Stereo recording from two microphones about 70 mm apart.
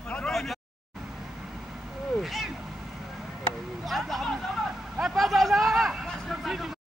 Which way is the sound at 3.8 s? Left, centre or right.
Centre.